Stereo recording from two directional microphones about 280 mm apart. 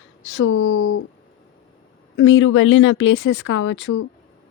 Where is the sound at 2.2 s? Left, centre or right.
Left.